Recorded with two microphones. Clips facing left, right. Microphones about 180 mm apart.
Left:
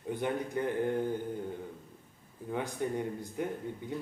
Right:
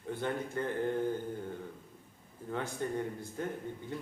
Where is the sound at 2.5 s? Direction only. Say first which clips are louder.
Left 2 dB; 15° left (ahead or behind).